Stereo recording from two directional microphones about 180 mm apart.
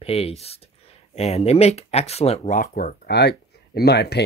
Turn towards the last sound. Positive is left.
turn(degrees=65)  # may be behind; listen again after turning